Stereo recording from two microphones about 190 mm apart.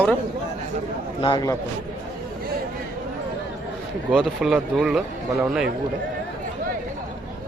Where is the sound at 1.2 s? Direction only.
20° left (ahead or behind).